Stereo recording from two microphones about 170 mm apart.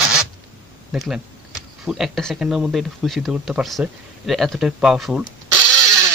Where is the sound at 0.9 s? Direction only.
Centre (ahead or behind).